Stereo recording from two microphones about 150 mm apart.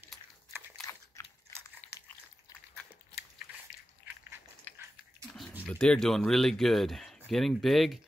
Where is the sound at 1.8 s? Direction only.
10° left (ahead or behind).